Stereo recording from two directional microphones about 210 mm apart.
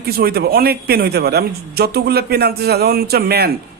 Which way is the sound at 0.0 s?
50° right (ahead or behind).